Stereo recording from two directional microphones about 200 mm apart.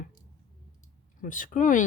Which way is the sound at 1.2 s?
40° left (ahead or behind).